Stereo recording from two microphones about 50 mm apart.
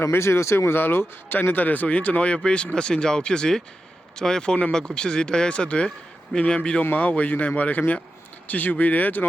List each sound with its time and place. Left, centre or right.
0.1 s speech: left
1.4 s speech: left